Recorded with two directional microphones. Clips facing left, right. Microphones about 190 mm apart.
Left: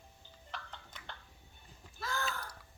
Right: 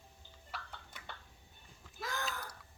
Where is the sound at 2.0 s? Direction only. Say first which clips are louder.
Left 2 dB; 20° right (ahead or behind).